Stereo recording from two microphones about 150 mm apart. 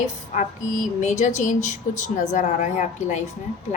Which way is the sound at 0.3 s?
55° left (ahead or behind).